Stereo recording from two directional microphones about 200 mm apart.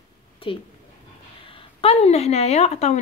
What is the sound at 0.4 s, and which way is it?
A woman's voice, 25° left (ahead or behind).